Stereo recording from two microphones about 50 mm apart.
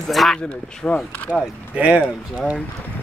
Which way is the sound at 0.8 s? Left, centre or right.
Left.